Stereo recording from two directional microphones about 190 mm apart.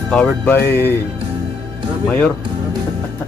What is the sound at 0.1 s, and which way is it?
Speech, 10° left (ahead or behind).